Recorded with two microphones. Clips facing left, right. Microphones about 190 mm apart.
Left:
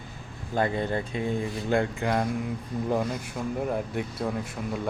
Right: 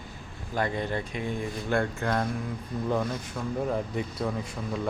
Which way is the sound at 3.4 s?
20° left (ahead or behind).